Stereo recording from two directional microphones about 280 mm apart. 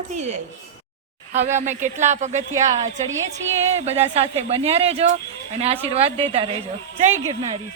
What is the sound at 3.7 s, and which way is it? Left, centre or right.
A woman's voice, right.